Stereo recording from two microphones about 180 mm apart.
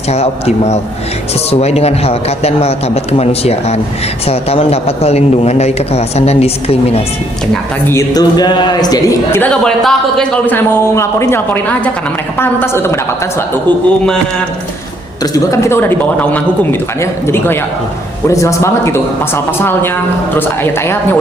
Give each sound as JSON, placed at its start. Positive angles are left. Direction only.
{"t": 0.1, "sound": "a man's voice", "side_deg": 35}
{"t": 7.9, "sound": "a man's voice", "side_deg": 20}
{"t": 15.2, "sound": "a man's voice", "side_deg": 20}